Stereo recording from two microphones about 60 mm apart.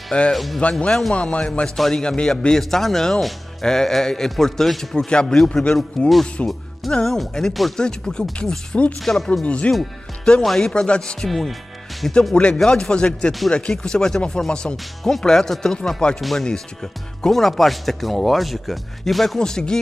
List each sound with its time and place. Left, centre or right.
0.3 s speech: centre
0.6 s speech: centre
1.8 s speech: centre
9.0 s speech: centre
10.7 s speech: centre
11.2 s speech: centre
16.2 s speech: centre